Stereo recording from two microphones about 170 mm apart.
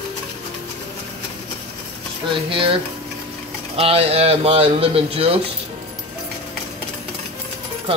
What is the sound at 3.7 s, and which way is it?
Speech, 35° right (ahead or behind).